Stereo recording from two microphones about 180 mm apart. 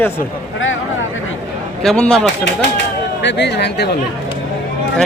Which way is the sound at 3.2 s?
75° left (ahead or behind).